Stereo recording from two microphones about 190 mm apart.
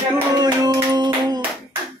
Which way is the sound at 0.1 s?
20° right (ahead or behind).